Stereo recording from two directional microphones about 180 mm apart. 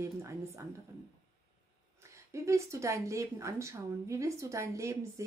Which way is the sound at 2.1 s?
15° right (ahead or behind).